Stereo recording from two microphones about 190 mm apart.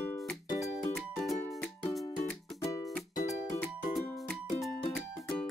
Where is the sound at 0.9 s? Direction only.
Centre (ahead or behind).